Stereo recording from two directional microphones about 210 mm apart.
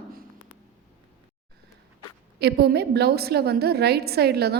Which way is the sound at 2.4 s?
50° right (ahead or behind).